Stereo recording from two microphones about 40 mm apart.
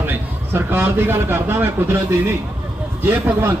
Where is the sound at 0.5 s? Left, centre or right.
Right.